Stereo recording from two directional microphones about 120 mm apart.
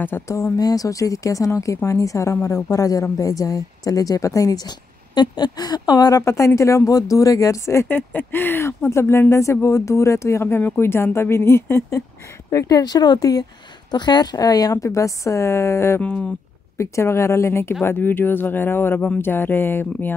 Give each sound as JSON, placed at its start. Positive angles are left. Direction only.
{"t": 0.0, "sound": "speech", "side_deg": 15}
{"t": 0.4, "sound": "speech", "side_deg": 30}
{"t": 12.4, "sound": "speech", "side_deg": 30}
{"t": 16.0, "sound": "speech", "side_deg": 10}
{"t": 16.7, "sound": "speech", "side_deg": 25}